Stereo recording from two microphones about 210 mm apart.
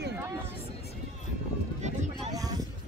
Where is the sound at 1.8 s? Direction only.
35° right (ahead or behind).